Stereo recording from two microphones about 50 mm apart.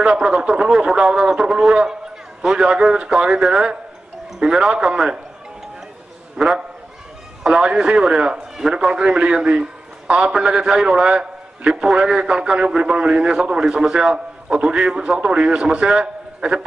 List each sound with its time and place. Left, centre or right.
0.0 s a man's voice: centre
6.3 s a man's voice: centre